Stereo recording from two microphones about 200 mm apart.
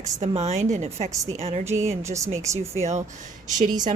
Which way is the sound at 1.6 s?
15° right (ahead or behind).